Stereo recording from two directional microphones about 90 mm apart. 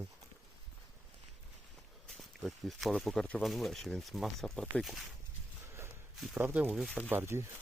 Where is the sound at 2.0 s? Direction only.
Centre (ahead or behind).